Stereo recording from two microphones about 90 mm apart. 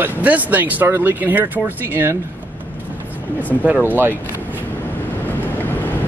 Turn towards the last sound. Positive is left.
turn(degrees=20)  # may be behind; listen again after turning